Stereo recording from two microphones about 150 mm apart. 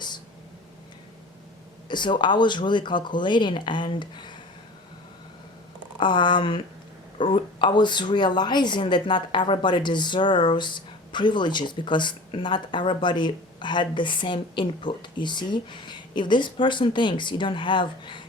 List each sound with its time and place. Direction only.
1.9 s speech: 30° left (ahead or behind)
6.0 s speech: 30° left (ahead or behind)